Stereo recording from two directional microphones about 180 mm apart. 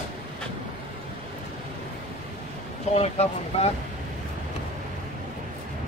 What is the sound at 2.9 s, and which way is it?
Speech, 35° left (ahead or behind).